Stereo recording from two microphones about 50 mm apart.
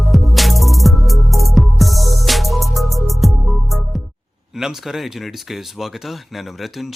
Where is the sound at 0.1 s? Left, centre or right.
Centre.